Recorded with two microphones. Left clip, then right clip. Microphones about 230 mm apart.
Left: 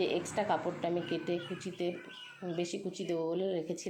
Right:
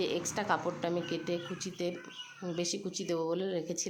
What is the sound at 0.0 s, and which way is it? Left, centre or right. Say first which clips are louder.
Speech: left 1 dB; centre.